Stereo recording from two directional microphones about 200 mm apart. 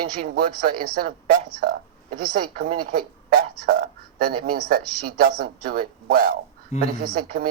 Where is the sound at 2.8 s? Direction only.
50° right (ahead or behind).